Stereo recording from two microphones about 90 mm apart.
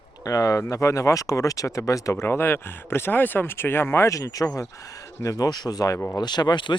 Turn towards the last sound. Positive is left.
turn(degrees=60)  # may be behind; listen again after turning